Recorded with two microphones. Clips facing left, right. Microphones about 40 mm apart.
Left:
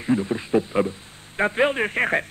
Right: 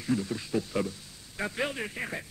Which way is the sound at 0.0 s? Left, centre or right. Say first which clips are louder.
Left 7 dB; left.